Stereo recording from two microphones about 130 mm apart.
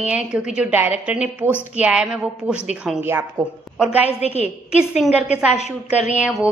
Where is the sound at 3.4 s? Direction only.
25° right (ahead or behind).